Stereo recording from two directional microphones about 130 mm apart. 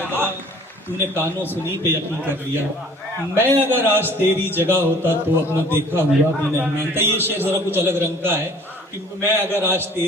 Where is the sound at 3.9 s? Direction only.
15° right (ahead or behind).